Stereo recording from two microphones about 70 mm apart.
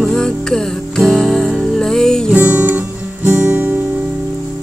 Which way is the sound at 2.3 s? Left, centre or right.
Centre.